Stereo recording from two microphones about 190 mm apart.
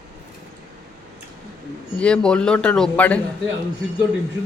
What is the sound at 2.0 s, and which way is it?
Speech, 5° left (ahead or behind).